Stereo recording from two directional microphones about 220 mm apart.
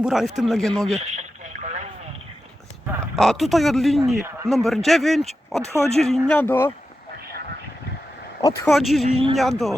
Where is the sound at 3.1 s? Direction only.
Centre (ahead or behind).